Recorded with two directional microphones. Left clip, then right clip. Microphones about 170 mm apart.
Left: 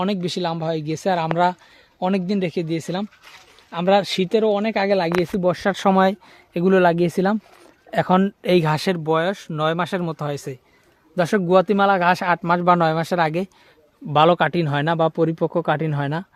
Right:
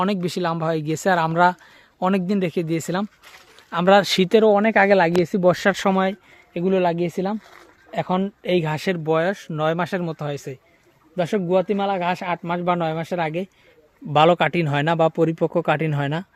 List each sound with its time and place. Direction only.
0.0 s speech: centre (ahead or behind); by 4.5 s 25° right (ahead or behind)
4.5 s speech: 5° right (ahead or behind)
5.4 s speech: 20° right (ahead or behind)
5.9 s speech: 20° left (ahead or behind)
6.5 s speech: 40° left (ahead or behind)
8.7 s speech: 15° left (ahead or behind)
9.1 s speech: centre (ahead or behind)
11.2 s speech: 25° left (ahead or behind)
11.4 s speech: 35° left (ahead or behind)
14.1 s speech: centre (ahead or behind)